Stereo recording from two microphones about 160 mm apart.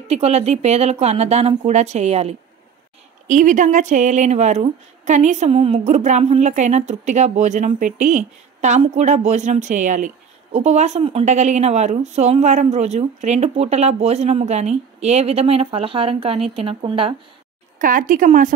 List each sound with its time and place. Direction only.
0.1 s speech: 40° right (ahead or behind)
3.3 s speech: 50° right (ahead or behind); by 17.1 s 35° right (ahead or behind)
17.7 s speech: 55° right (ahead or behind)